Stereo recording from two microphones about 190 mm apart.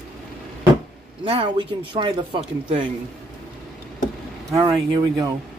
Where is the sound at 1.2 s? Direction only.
25° right (ahead or behind).